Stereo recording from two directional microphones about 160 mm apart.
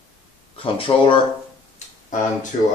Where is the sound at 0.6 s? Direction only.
35° left (ahead or behind).